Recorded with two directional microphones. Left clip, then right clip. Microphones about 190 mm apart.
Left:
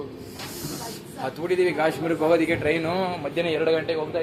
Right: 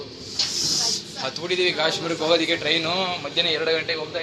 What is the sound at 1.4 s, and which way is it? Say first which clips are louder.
A man's voice: even; 20° left (ahead or behind).